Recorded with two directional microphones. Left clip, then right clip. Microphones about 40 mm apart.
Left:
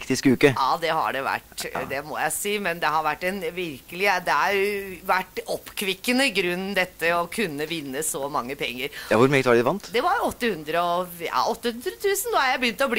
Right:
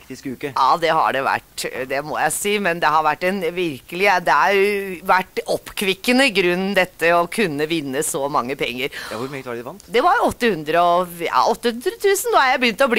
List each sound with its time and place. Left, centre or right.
0.1 s speech: left
7.0 s speech: left
8.5 s speech: left